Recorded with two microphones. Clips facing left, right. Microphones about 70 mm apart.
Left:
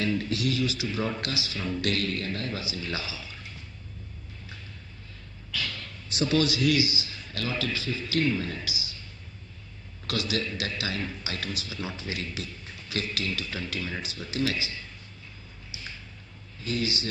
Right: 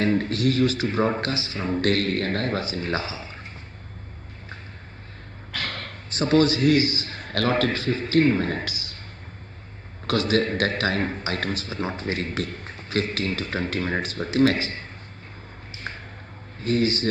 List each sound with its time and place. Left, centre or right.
0.0 s speech: right
1.8 s speech: right
5.5 s a sound: right
6.0 s a man's voice: right
10.0 s a man's voice: right
15.7 s a sound: right
16.5 s speech: right